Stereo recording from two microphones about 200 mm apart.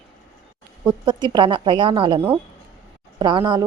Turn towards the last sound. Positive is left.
turn(degrees=-20)  # may be behind; listen again after turning